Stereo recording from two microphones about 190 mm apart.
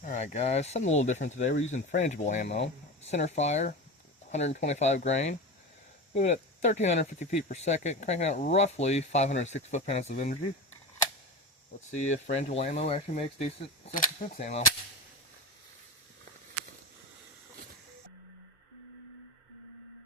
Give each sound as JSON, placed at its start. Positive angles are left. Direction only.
{"t": 0.0, "sound": "speech", "side_deg": 40}
{"t": 11.9, "sound": "speech", "side_deg": 35}